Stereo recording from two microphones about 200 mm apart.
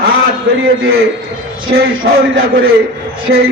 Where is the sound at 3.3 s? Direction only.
65° right (ahead or behind).